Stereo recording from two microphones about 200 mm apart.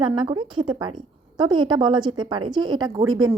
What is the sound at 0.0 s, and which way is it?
A woman's voice, 25° right (ahead or behind).